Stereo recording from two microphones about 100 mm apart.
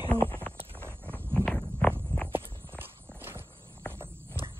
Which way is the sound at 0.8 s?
20° right (ahead or behind).